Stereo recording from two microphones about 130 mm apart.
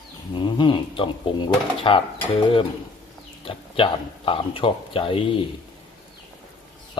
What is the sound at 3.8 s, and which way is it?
Speech, 45° left (ahead or behind).